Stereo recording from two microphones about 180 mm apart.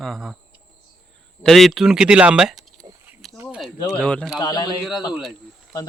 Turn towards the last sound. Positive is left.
turn(degrees=25)  # may be behind; listen again after turning